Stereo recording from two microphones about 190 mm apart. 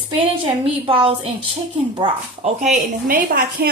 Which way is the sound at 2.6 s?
45° right (ahead or behind).